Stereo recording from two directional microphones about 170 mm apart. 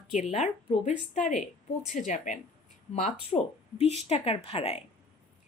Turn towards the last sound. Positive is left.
turn(degrees=35)  # may be behind; listen again after turning